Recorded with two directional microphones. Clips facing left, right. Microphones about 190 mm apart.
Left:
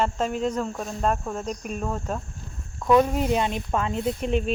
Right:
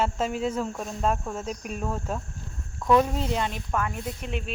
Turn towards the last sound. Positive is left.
turn(degrees=25)  # may be behind; listen again after turning